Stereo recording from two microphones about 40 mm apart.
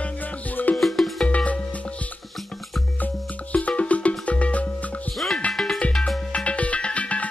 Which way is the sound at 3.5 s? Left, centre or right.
Left.